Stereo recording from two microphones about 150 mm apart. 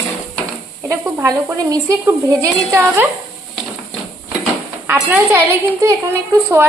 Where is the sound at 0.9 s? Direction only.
20° right (ahead or behind).